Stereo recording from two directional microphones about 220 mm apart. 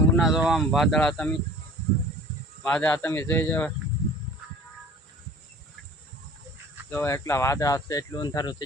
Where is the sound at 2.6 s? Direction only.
5° left (ahead or behind).